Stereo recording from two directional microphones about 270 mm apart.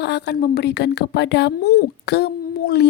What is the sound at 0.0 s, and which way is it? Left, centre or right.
Speech, left.